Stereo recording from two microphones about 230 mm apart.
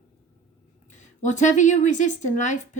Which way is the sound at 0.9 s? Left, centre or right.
Left.